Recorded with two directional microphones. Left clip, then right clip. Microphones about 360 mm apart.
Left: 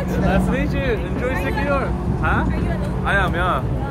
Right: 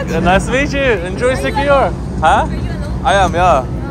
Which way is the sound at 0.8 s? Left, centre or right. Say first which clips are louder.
Right 9 dB; centre.